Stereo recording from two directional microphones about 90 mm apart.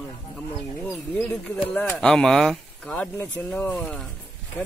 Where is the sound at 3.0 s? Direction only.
20° left (ahead or behind).